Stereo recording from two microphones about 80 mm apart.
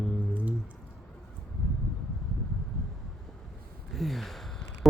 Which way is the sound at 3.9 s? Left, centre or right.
Centre.